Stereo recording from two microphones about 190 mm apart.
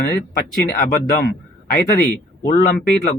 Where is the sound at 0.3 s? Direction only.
45° left (ahead or behind).